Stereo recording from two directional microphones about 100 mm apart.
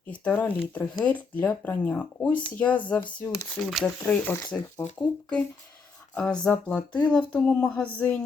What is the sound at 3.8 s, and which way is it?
Speech, 15° left (ahead or behind).